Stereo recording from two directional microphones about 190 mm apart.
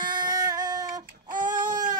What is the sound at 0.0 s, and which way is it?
Child singing, 25° right (ahead or behind).